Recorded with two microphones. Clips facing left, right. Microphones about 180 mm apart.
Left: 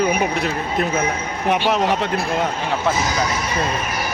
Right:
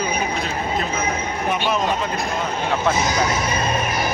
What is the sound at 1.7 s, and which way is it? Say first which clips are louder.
Speech: left 2 dB; 75° left (ahead or behind).